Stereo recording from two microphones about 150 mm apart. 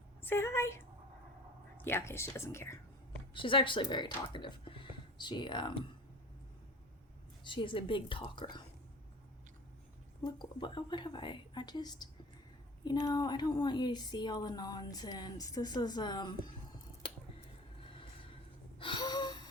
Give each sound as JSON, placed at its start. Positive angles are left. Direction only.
{"t": 0.2, "sound": "a woman's voice", "side_deg": 15}
{"t": 1.8, "sound": "speech", "side_deg": 15}
{"t": 3.3, "sound": "speech", "side_deg": 35}
{"t": 7.4, "sound": "a woman's voice", "side_deg": 35}
{"t": 10.2, "sound": "speech", "side_deg": 30}
{"t": 18.8, "sound": "gasp", "side_deg": 30}